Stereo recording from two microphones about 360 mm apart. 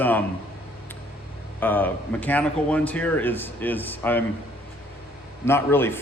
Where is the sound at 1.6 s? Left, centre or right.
Centre.